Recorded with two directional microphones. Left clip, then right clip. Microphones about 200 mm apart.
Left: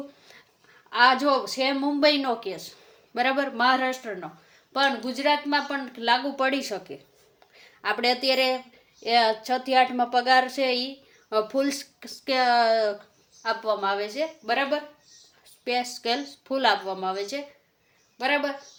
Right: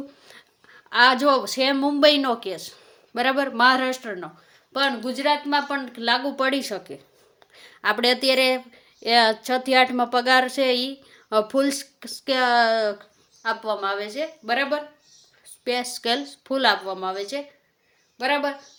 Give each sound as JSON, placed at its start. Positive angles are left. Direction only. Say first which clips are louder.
{"t": 0.9, "sound": "speech", "louder": "right 3 dB", "side_deg": -35}
{"t": 7.5, "sound": "speech", "louder": "right 5 dB", "side_deg": -35}